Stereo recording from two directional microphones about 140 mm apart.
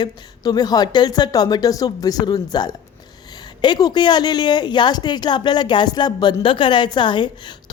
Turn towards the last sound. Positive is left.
turn(degrees=35)  # may be behind; listen again after turning